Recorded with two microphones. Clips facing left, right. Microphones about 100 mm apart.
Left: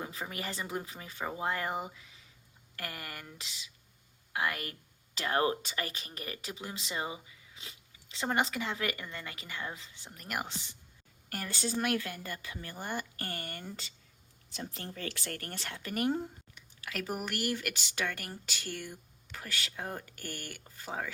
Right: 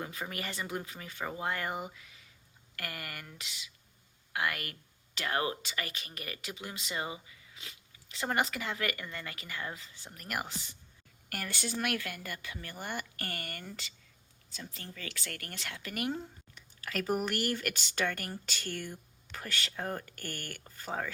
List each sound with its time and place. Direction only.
0.1 s speech: 25° left (ahead or behind)
11.8 s speech: 25° left (ahead or behind)
14.8 s speech: 45° left (ahead or behind)
15.3 s speech: 30° left (ahead or behind)
16.1 s a sound: 15° left (ahead or behind)
16.8 s speech: 5° left (ahead or behind)